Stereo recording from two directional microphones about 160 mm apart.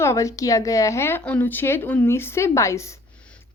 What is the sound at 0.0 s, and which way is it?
A woman's voice, 20° left (ahead or behind).